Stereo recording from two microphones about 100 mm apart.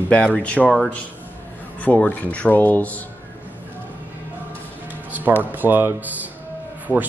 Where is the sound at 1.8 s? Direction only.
15° left (ahead or behind).